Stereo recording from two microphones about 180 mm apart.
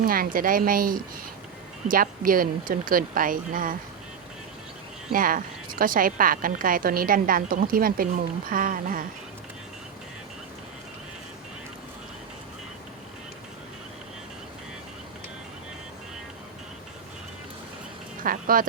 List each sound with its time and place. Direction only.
0.0 s a woman's voice: 55° right (ahead or behind)
5.1 s a woman's voice: 50° right (ahead or behind)
18.2 s speech: 50° right (ahead or behind)